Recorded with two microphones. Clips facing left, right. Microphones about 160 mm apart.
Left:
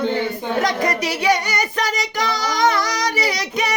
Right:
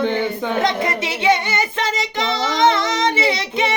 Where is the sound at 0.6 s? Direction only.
25° right (ahead or behind).